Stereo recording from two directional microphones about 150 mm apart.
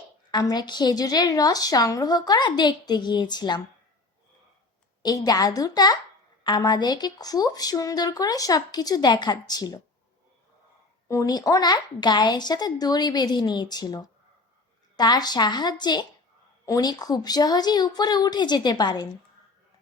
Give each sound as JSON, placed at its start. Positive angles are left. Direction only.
{"t": 0.3, "sound": "speech", "side_deg": 30}
{"t": 5.0, "sound": "speech", "side_deg": 25}
{"t": 11.1, "sound": "speech", "side_deg": 25}